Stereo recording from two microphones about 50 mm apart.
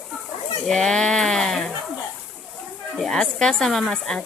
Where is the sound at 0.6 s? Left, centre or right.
Centre.